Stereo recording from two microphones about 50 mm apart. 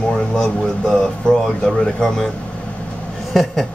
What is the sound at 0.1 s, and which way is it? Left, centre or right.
Speech, centre.